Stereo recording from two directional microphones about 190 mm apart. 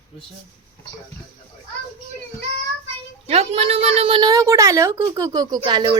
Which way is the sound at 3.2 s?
35° right (ahead or behind).